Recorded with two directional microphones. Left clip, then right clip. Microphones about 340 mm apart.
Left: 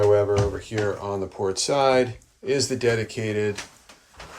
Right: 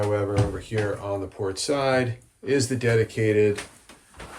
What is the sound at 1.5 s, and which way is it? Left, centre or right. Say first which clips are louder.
Speech: left 3 dB; centre.